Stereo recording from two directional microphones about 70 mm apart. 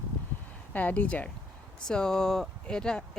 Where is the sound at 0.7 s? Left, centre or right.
Left.